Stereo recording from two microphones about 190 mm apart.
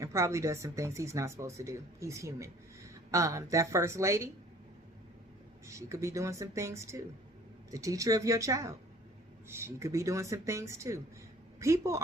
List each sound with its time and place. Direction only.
0.0 s speech: 15° right (ahead or behind)
5.6 s speech: 15° right (ahead or behind)